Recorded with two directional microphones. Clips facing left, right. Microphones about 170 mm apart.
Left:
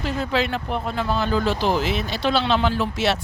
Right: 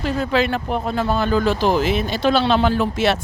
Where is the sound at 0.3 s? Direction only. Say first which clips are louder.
Right 4 dB; 50° right (ahead or behind).